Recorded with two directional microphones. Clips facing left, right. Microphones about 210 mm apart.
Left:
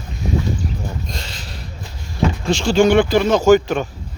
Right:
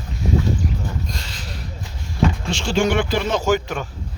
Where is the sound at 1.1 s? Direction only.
25° left (ahead or behind).